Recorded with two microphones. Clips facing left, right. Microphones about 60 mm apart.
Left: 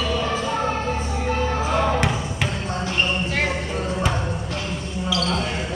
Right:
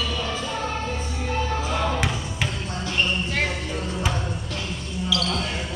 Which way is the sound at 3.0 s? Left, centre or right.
Centre.